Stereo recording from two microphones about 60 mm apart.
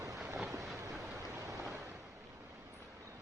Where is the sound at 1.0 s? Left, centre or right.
Right.